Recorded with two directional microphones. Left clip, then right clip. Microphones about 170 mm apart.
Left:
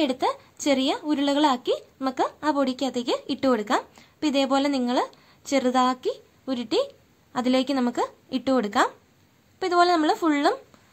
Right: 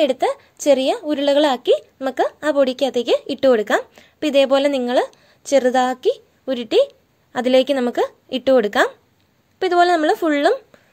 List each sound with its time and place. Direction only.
0.0 s speech: 25° right (ahead or behind)